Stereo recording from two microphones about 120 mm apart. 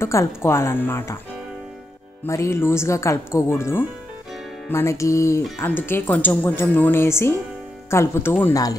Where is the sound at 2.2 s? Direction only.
25° left (ahead or behind).